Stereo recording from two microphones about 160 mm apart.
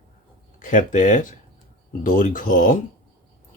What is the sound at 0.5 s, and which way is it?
Speech, 55° left (ahead or behind).